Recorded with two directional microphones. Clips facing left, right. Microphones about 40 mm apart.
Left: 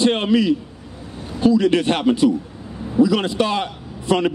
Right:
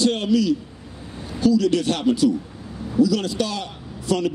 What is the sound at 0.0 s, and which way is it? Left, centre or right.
A man's voice, left.